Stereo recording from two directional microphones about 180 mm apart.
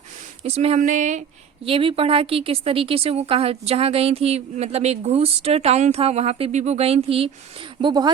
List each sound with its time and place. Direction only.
0.4 s speech: 35° right (ahead or behind)
1.6 s a woman's voice: 30° right (ahead or behind)